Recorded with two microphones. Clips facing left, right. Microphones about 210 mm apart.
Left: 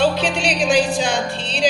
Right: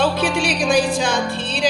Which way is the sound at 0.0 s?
55° right (ahead or behind).